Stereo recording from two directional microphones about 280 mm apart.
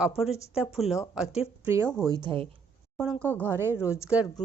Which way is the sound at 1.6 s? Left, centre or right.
Centre.